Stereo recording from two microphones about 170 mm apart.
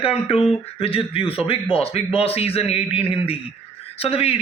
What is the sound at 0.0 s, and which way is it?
A man's voice, 35° left (ahead or behind).